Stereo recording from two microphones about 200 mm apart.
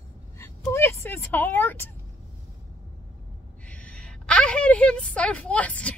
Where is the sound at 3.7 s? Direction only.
5° left (ahead or behind).